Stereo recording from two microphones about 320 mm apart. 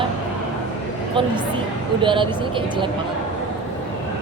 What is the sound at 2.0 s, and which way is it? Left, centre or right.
Speech, centre.